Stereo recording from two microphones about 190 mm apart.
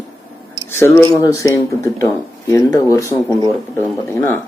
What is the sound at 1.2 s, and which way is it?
Speech, 20° left (ahead or behind).